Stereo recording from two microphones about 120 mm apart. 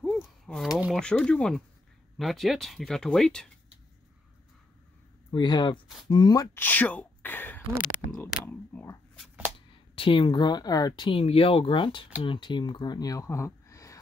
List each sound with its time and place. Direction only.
0.0 s a sound: centre (ahead or behind)
0.9 s speech: 10° left (ahead or behind)
5.3 s speech: 35° left (ahead or behind)
6.5 s speech: 15° left (ahead or behind)
9.9 s speech: 45° left (ahead or behind); by 13.9 s 25° left (ahead or behind)